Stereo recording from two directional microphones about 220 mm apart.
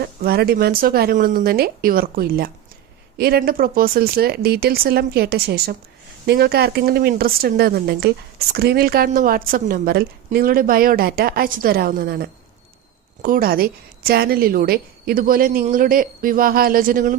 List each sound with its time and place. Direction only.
0.0 s a woman's voice: 45° right (ahead or behind)